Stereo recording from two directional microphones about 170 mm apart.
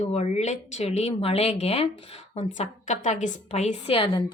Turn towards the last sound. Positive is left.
turn(degrees=40)  # may be behind; listen again after turning